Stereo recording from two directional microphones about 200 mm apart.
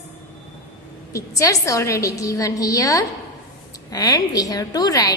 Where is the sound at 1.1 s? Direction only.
15° left (ahead or behind).